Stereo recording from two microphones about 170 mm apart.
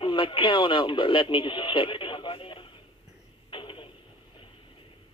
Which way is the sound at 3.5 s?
30° left (ahead or behind).